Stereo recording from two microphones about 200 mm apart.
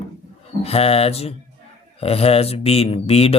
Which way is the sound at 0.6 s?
30° left (ahead or behind).